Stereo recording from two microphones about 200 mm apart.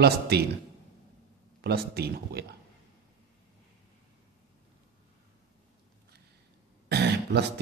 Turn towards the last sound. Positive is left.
turn(degrees=-55)  # may be behind; listen again after turning